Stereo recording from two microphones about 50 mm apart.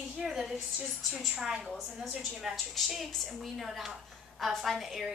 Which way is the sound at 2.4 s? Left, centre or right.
Centre.